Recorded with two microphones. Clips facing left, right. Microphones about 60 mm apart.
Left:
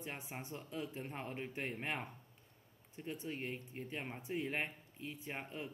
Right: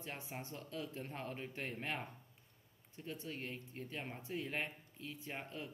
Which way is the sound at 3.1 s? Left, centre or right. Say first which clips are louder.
Left 3 dB; centre.